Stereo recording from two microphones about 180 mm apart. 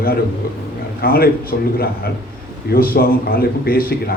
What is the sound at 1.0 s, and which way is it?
A man's voice, 55° left (ahead or behind).